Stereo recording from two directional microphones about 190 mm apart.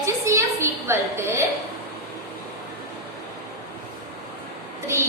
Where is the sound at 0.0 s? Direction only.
15° right (ahead or behind).